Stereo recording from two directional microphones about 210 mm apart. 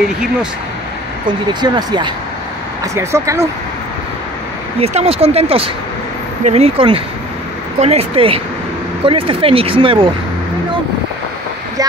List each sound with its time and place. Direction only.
1.5 s speech: 20° right (ahead or behind)
4.7 s speech: 30° right (ahead or behind)